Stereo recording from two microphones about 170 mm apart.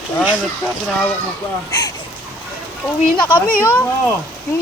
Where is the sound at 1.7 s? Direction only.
20° left (ahead or behind).